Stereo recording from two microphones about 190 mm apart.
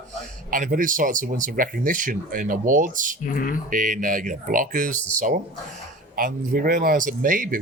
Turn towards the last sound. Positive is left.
turn(degrees=-45)  # may be behind; listen again after turning